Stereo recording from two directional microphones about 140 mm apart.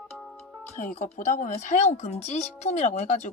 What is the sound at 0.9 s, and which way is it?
Speech, 55° left (ahead or behind).